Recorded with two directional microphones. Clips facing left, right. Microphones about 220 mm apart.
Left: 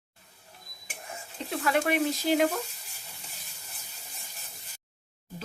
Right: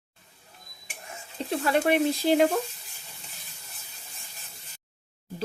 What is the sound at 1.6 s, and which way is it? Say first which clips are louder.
Speech: right 3 dB; 30° right (ahead or behind).